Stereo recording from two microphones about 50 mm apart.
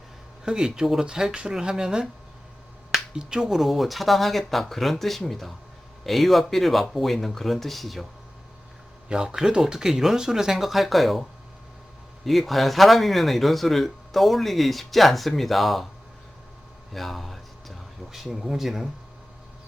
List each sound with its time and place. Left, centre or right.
0.4 s speech: centre
3.2 s speech: centre
3.6 s speech: centre
9.0 s speech: centre
16.9 s a sound: centre